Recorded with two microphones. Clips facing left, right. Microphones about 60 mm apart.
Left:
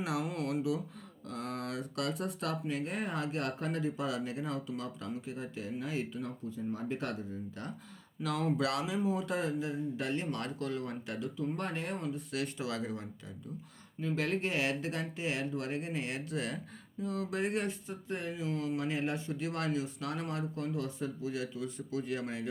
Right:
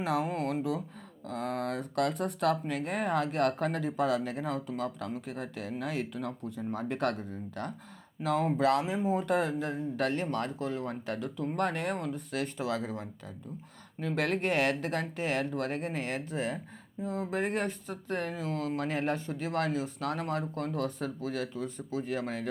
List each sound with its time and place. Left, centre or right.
0.0 s speech: right
8.2 s speech: right
11.3 s speech: right
14.0 s speech: right